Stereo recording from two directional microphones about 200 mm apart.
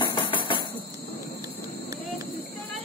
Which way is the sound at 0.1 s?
25° left (ahead or behind).